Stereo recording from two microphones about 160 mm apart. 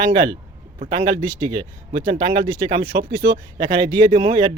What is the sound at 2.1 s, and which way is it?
Speech, 30° right (ahead or behind).